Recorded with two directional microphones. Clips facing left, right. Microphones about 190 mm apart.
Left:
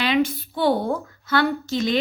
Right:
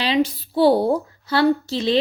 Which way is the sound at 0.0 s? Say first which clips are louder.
Right 1 dB; 35° right (ahead or behind).